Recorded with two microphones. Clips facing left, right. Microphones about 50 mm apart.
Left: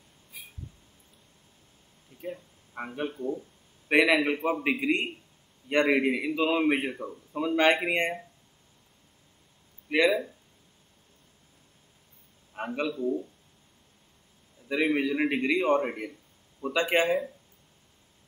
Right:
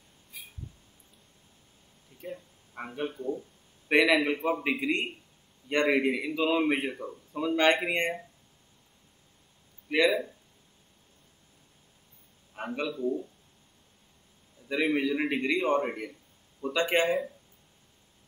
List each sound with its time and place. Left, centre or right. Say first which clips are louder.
0.3 s a sound: even; centre
2.7 s a man's voice: left 1 dB; centre
9.8 s speech: left 1 dB; centre
12.5 s speech: left 2 dB; centre
14.7 s a man's voice: left 1 dB; centre